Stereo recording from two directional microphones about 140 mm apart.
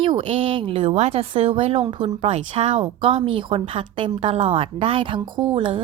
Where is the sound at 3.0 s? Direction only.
40° right (ahead or behind).